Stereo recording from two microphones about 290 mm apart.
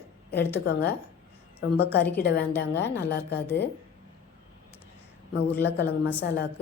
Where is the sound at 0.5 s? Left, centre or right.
Left.